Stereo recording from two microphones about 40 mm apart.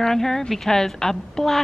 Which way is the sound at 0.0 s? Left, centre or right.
Centre.